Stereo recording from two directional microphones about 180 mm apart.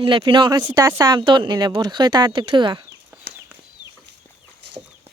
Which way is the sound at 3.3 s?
80° right.